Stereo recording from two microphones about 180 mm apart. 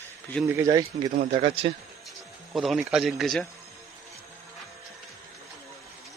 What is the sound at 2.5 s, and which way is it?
Speech, centre (ahead or behind).